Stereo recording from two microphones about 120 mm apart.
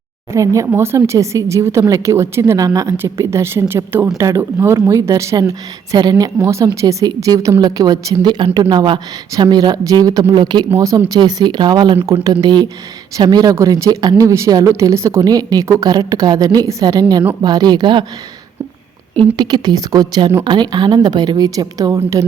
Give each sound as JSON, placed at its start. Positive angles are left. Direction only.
{"t": 0.3, "sound": "a woman's voice", "side_deg": -25}
{"t": 19.4, "sound": "a woman's voice", "side_deg": -35}